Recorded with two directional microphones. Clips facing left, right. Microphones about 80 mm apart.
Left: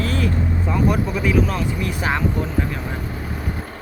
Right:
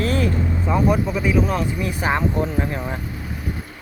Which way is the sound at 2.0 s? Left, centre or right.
Right.